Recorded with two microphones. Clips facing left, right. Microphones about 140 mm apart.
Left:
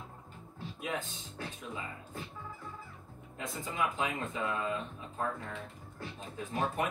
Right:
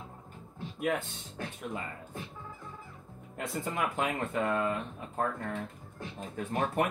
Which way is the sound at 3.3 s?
60° right (ahead or behind).